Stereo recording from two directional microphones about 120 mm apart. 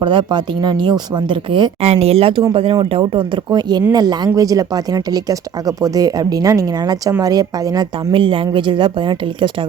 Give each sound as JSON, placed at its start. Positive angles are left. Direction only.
{"t": 0.0, "sound": "speech", "side_deg": -40}
{"t": 1.8, "sound": "speech", "side_deg": -60}
{"t": 8.1, "sound": "speech", "side_deg": -50}